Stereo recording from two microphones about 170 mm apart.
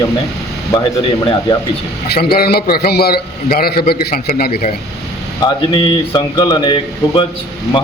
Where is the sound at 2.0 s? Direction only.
65° left (ahead or behind).